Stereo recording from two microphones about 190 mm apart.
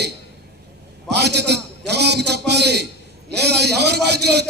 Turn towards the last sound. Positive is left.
turn(degrees=-60)  # may be behind; listen again after turning